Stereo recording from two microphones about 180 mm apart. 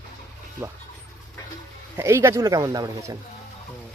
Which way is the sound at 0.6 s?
10° right (ahead or behind).